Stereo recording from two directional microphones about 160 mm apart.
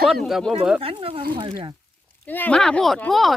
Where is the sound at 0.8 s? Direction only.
35° right (ahead or behind).